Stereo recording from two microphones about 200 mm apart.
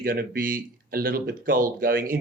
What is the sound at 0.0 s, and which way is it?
Speech, 45° right (ahead or behind).